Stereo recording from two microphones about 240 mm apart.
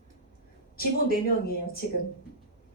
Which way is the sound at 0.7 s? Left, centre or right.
Left.